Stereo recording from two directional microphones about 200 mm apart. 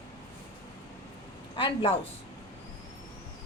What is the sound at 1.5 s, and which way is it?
Speech, 25° left (ahead or behind).